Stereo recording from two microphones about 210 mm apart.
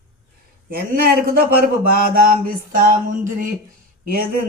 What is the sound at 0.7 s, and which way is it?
Speech, 45° right (ahead or behind).